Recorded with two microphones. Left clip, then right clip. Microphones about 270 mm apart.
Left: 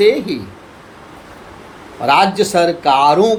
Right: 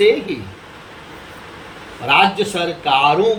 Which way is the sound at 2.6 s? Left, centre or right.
Left.